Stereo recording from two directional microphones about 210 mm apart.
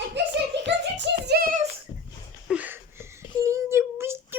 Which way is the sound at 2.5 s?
10° right (ahead or behind).